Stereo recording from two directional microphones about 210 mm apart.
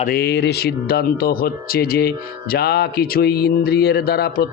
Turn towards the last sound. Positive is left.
turn(degrees=50)  # may be behind; listen again after turning